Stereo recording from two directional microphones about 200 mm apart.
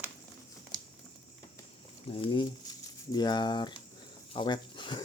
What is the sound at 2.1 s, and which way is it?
Speech, 25° left (ahead or behind).